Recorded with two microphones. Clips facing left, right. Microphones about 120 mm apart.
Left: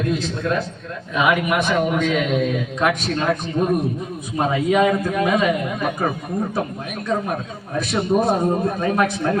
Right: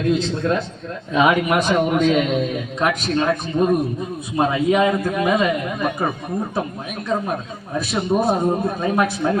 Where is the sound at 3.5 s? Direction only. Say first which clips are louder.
Right 4 dB; 10° right (ahead or behind).